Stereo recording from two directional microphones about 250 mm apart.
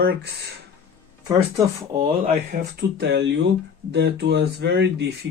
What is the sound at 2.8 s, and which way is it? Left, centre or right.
Speech, right.